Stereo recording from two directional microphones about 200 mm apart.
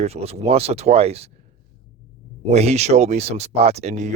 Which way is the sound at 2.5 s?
35° right (ahead or behind).